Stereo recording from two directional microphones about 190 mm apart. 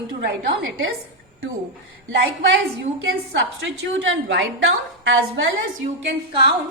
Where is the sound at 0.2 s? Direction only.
60° right (ahead or behind).